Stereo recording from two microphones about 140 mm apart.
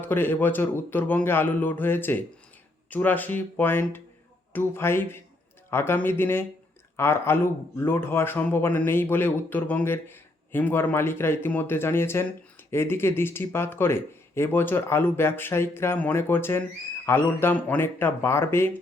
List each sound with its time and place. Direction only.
0.0 s a man's voice: 15° left (ahead or behind)